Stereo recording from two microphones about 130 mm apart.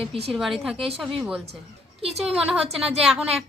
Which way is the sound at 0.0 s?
45° right (ahead or behind).